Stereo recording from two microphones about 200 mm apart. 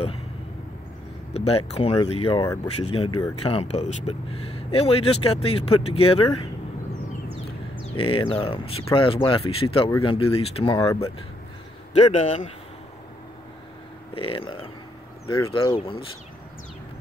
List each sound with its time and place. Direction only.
1.3 s speech: 30° left (ahead or behind)
2.4 s speech: 15° left (ahead or behind)
3.4 s speech: 30° left (ahead or behind)
7.9 s speech: 25° left (ahead or behind)
9.8 s speech: 15° left (ahead or behind)
10.1 s speech: 30° left (ahead or behind)
11.9 s a man's voice: 35° left (ahead or behind)
14.1 s speech: 25° left (ahead or behind)